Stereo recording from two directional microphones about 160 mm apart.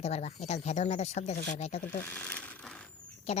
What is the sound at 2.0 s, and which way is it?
Speech, 10° left (ahead or behind).